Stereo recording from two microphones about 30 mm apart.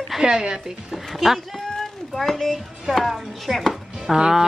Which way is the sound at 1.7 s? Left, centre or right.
Centre.